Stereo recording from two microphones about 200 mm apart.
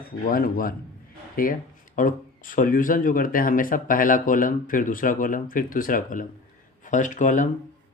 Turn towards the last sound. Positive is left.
turn(degrees=40)  # may be behind; listen again after turning